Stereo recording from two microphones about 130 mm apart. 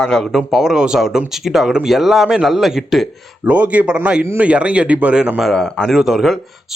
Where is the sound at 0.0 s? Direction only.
5° left (ahead or behind).